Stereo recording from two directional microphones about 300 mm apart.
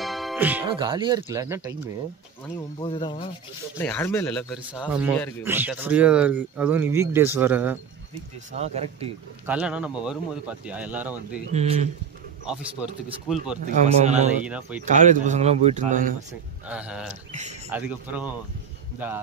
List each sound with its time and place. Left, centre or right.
0.0 s music: centre
0.7 s speech: centre
2.8 s speech: centre
8.5 s a man's voice: right
9.5 s speech: centre
11.5 s a man's voice: right
12.4 s speech: centre
13.8 s a man's voice: right
14.4 s speech: centre
14.9 s a man's voice: right
16.6 s speech: centre
17.3 s a man's voice: right
17.6 s speech: centre